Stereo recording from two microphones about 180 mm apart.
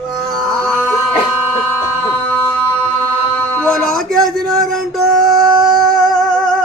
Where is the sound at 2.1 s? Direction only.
15° left (ahead or behind).